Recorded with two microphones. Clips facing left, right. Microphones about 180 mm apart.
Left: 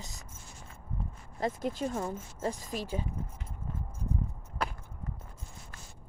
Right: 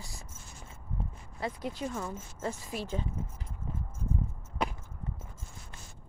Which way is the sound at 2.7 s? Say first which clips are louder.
Left 1 dB; 10° right (ahead or behind).